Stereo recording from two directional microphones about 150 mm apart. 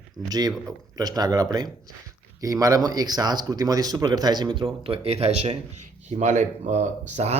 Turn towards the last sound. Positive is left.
turn(degrees=-50)  # may be behind; listen again after turning